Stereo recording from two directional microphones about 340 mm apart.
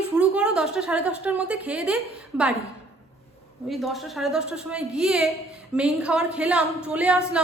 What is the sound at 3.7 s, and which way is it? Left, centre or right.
A woman's voice, centre.